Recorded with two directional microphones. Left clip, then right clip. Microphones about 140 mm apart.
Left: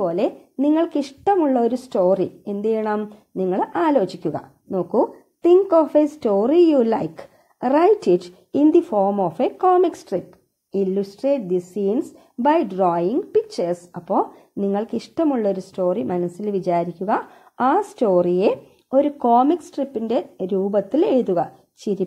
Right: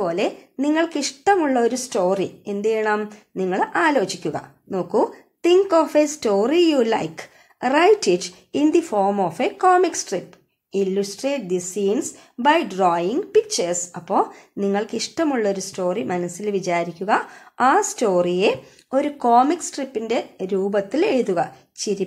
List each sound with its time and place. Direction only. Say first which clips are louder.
0.0 s speech: left 1 dB; 45° left (ahead or behind)